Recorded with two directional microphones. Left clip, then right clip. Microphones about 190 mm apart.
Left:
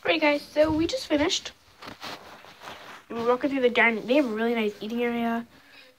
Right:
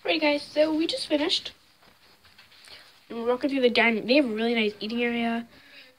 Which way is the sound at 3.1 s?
15° right (ahead or behind).